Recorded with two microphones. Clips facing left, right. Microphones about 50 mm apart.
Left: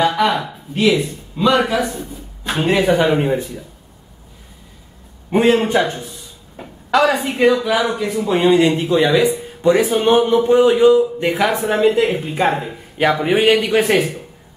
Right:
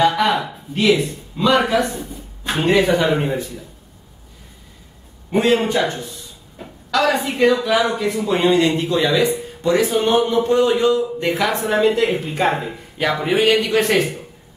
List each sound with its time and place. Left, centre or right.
0.0 s a man's voice: centre
5.3 s speech: left
7.6 s speech: centre
9.6 s speech: left; by 12.7 s centre
13.1 s speech: centre